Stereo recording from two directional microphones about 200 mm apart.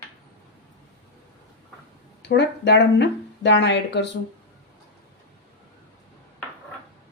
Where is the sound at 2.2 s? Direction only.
55° left (ahead or behind).